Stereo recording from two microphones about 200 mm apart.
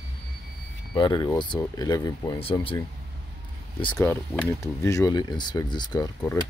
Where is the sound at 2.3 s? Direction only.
30° left (ahead or behind).